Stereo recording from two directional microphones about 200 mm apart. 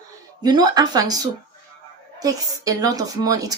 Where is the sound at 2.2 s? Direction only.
20° right (ahead or behind).